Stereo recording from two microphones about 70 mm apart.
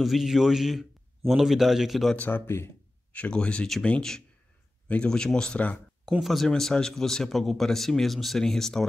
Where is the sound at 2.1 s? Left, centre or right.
Left.